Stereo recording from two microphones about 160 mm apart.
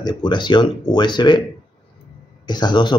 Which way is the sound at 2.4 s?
25° left (ahead or behind).